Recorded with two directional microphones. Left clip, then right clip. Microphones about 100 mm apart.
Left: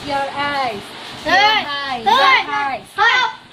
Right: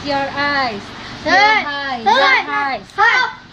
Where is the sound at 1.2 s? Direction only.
35° right (ahead or behind).